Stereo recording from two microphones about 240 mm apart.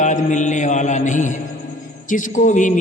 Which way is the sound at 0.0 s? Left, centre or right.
Left.